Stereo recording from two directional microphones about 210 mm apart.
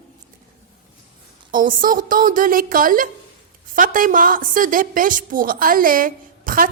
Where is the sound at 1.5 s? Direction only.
40° right (ahead or behind).